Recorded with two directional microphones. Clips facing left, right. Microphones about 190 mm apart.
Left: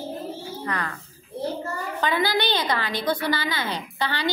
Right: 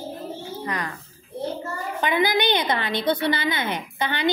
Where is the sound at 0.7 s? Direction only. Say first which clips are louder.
Even; 15° right (ahead or behind).